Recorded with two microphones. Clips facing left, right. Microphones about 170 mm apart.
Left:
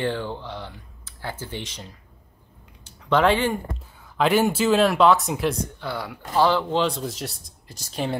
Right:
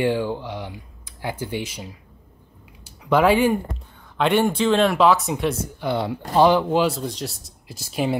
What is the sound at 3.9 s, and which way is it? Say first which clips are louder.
Speech: right 1 dB; centre (ahead or behind).